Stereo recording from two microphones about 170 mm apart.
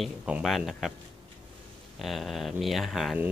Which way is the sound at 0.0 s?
5° right (ahead or behind).